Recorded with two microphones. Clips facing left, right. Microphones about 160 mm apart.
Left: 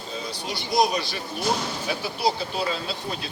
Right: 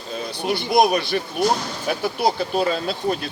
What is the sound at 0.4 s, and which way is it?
Speech, 60° right (ahead or behind).